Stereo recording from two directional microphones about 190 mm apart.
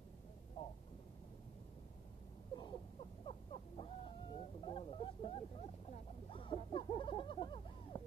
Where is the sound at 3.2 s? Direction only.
30° left (ahead or behind).